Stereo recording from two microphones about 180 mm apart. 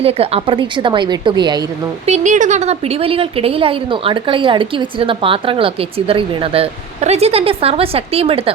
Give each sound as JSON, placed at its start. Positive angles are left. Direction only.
{"t": 0.0, "sound": "a woman's voice", "side_deg": -35}
{"t": 2.0, "sound": "a woman's voice", "side_deg": -40}